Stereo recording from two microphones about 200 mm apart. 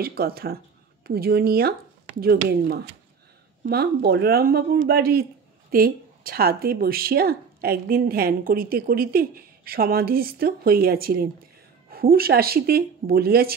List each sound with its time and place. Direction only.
0.0 s speech: 50° right (ahead or behind)